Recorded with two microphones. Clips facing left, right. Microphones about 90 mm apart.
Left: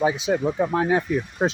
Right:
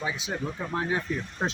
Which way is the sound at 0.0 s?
70° left (ahead or behind).